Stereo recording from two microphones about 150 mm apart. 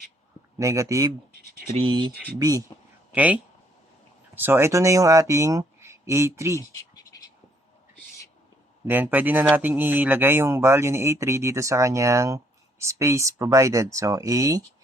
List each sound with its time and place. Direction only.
0.6 s speech: 20° right (ahead or behind)
1.7 s speech: 35° right (ahead or behind)
2.4 s speech: 25° right (ahead or behind)
3.1 s speech: 10° right (ahead or behind)
6.6 s scratch: 25° left (ahead or behind)
8.9 s speech: 10° right (ahead or behind)